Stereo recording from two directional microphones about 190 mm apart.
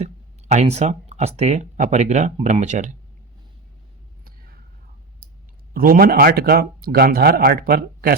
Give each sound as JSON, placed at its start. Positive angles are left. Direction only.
{"t": 0.0, "sound": "speech", "side_deg": -35}
{"t": 4.2, "sound": "a sound", "side_deg": -50}
{"t": 5.7, "sound": "speech", "side_deg": -50}